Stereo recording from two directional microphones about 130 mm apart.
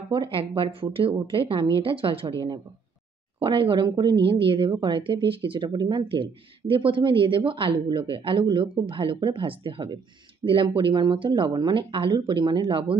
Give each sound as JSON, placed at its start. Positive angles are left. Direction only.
{"t": 0.1, "sound": "a woman's voice", "side_deg": -40}
{"t": 3.3, "sound": "speech", "side_deg": -40}